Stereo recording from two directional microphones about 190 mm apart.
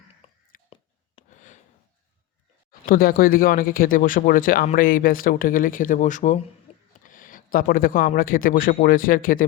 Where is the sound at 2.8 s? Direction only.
50° left (ahead or behind).